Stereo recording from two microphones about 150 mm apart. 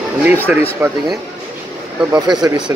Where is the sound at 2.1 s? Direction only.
25° right (ahead or behind).